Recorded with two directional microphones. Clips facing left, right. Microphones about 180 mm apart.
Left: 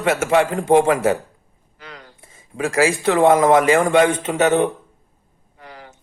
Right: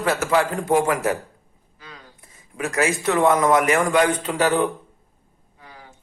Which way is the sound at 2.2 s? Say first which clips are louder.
Left 5 dB; 25° left (ahead or behind).